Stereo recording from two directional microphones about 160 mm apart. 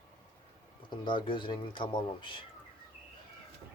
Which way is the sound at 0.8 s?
30° left (ahead or behind).